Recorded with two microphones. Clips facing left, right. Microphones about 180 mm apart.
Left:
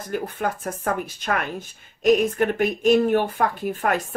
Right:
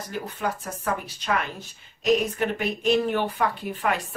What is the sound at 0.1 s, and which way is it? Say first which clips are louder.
Speech: left 4 dB; 50° left (ahead or behind).